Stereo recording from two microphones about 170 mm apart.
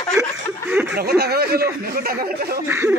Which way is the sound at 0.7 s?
10° right (ahead or behind).